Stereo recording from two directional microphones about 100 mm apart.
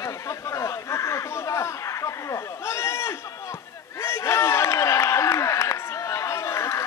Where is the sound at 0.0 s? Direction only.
30° left (ahead or behind).